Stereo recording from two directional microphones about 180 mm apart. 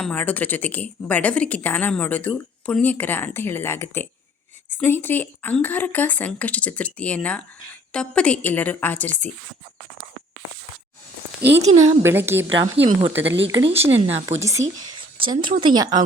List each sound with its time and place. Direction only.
0.0 s a woman's voice: 10° left (ahead or behind)
11.6 s speech: 40° right (ahead or behind)
12.0 s a woman's voice: 10° right (ahead or behind)
12.8 s speech: 35° right (ahead or behind)
13.1 s speech: 85° right
13.9 s speech: 35° right (ahead or behind)
14.8 s a sound: 25° right (ahead or behind)
15.6 s speech: 20° right (ahead or behind)